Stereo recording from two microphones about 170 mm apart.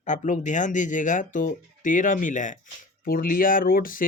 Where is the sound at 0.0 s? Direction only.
45° left (ahead or behind).